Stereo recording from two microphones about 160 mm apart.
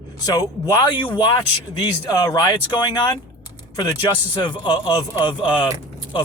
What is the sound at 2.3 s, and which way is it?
Speech, 30° left (ahead or behind).